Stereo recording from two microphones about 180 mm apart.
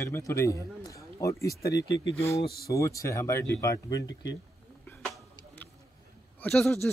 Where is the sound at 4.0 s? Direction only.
80° left.